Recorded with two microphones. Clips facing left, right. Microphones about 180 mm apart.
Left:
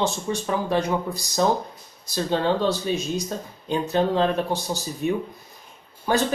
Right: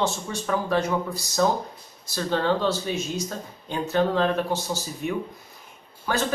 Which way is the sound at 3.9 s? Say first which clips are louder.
Even; 20° left (ahead or behind).